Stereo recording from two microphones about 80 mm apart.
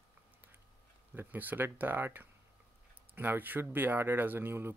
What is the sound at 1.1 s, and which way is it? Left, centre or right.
Speech, right.